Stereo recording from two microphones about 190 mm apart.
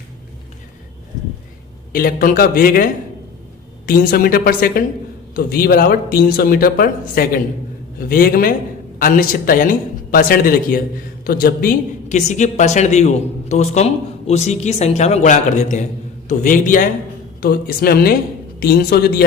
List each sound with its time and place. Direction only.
1.9 s a man's voice: 50° left (ahead or behind)